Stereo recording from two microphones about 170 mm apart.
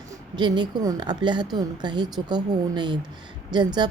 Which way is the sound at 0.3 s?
25° right (ahead or behind).